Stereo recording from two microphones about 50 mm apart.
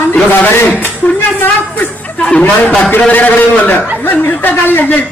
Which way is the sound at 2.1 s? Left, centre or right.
Left.